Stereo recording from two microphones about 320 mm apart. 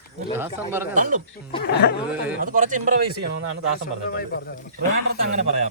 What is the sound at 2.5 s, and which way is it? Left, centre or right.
Speech, right.